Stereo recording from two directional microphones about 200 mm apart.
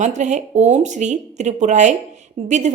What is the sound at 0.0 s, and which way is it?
A woman's voice, 35° right (ahead or behind).